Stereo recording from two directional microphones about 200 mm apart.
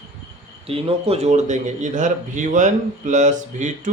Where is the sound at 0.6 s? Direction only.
30° right (ahead or behind).